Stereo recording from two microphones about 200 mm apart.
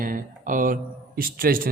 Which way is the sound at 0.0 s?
45° right (ahead or behind).